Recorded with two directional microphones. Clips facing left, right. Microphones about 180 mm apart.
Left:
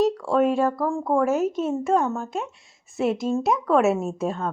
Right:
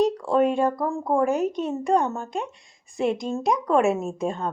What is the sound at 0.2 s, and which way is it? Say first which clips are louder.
Speech: even; centre (ahead or behind).